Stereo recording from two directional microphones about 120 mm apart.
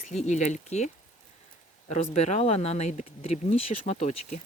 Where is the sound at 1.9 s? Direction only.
70° left (ahead or behind).